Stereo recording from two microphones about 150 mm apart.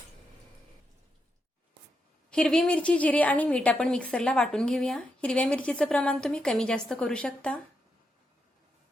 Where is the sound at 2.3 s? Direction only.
5° left (ahead or behind).